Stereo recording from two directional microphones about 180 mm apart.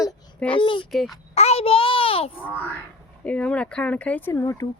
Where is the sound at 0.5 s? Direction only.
30° left (ahead or behind).